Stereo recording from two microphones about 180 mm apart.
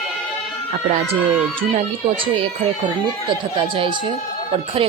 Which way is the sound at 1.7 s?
35° right (ahead or behind).